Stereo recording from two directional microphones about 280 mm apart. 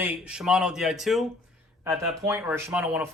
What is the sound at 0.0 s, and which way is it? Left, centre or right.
Speech, centre.